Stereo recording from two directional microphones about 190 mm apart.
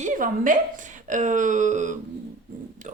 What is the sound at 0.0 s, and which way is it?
A woman's voice, 45° right (ahead or behind).